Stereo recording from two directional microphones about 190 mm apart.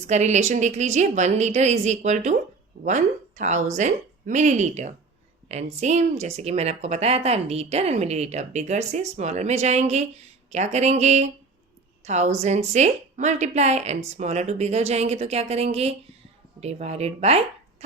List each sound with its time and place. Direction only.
0.1 s speech: 35° right (ahead or behind)